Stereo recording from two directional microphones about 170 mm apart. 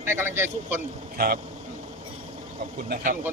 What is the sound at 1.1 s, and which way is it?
Speech, 60° right (ahead or behind).